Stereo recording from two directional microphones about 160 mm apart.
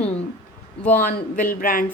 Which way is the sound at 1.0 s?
60° left (ahead or behind).